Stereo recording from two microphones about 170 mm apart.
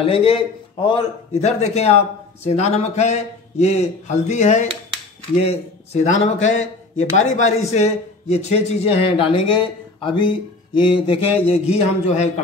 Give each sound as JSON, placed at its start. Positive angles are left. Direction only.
{"t": 0.0, "sound": "a man's voice", "side_deg": 35}